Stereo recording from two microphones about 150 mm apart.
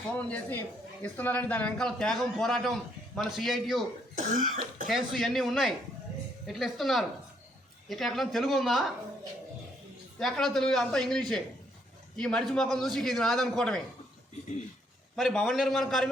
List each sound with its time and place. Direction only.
0.1 s a man's voice: 10° left (ahead or behind)
4.1 s cough: 60° right (ahead or behind)
4.9 s a man's voice: centre (ahead or behind)
10.2 s a man's voice: 5° left (ahead or behind)
15.1 s a man's voice: centre (ahead or behind)